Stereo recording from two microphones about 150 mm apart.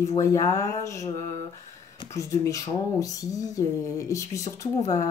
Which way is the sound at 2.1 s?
20° left (ahead or behind).